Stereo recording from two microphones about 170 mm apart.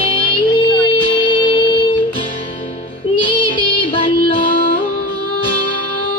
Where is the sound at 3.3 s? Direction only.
30° left (ahead or behind).